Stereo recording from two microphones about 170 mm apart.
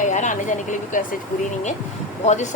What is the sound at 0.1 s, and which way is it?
Speech, 45° left (ahead or behind).